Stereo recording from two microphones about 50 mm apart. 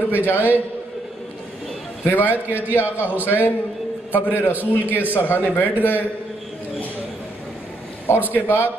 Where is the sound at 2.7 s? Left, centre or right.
Left.